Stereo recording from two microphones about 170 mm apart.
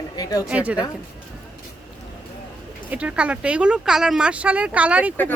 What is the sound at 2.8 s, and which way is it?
Speech, 5° right (ahead or behind).